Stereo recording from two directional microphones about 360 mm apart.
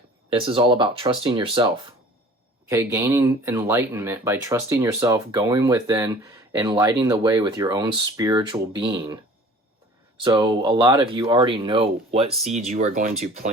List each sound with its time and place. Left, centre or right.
0.3 s speech: centre
10.2 s speech: centre